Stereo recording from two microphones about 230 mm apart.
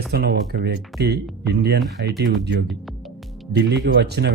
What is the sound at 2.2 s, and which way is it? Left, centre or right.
A man's voice, right.